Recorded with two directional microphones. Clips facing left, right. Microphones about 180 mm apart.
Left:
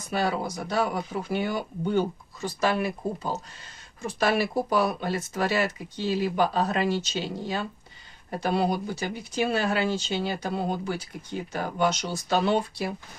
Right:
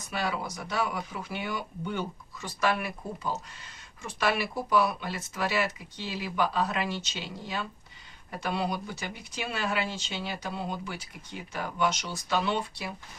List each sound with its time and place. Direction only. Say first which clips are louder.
0.1 s speech: left 5 dB; 35° left (ahead or behind)